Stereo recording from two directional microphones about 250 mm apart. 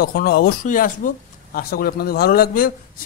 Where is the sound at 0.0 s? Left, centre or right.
Left.